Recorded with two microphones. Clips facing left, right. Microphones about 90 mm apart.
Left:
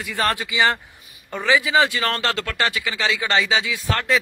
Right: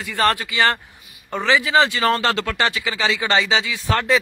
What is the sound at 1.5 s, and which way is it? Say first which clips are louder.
Speech: right 1 dB; 5° left (ahead or behind).